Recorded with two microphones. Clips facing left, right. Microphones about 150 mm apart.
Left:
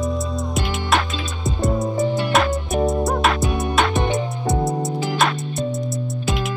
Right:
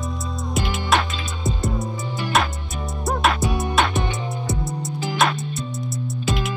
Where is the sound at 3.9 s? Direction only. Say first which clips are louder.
Left 5 dB; 20° left (ahead or behind).